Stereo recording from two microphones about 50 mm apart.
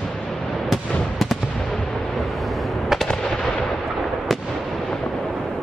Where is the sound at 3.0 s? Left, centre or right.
Centre.